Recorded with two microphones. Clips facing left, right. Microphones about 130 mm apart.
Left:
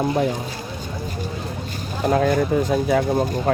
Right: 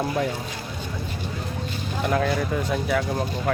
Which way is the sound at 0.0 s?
25° left (ahead or behind).